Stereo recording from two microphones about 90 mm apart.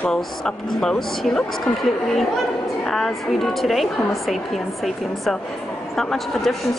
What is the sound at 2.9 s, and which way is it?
A woman's voice, 5° left (ahead or behind).